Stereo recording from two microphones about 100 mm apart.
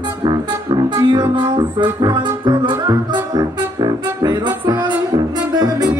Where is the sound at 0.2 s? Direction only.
45° right (ahead or behind).